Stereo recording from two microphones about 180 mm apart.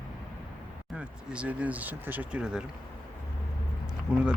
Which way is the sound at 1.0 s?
5° right (ahead or behind).